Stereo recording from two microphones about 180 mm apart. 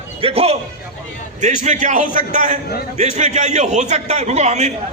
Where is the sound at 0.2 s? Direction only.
35° right (ahead or behind).